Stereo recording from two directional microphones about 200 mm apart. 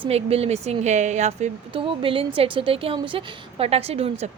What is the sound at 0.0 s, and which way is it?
Speech, 30° right (ahead or behind).